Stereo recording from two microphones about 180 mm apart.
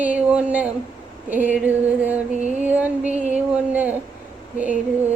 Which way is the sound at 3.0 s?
40° right (ahead or behind).